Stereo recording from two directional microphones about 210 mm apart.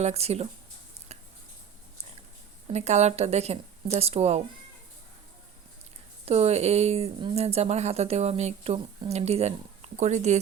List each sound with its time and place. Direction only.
0.0 s speech: 30° right (ahead or behind)
2.7 s a woman's voice: 30° right (ahead or behind)
6.2 s a woman's voice: 30° right (ahead or behind)